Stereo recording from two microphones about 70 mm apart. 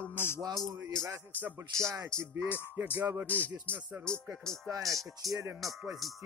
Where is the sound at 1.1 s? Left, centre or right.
Right.